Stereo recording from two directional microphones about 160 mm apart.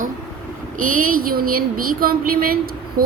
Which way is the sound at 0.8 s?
55° right (ahead or behind).